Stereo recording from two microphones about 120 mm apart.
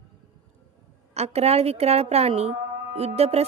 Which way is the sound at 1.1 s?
60° right (ahead or behind).